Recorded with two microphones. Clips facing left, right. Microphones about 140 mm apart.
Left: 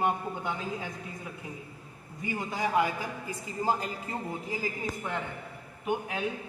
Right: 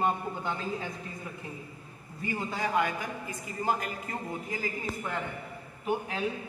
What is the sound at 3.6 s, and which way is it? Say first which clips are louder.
Speech: left 1 dB; 30° left (ahead or behind).